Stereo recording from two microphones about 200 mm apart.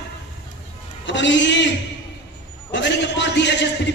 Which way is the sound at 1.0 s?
65° left (ahead or behind).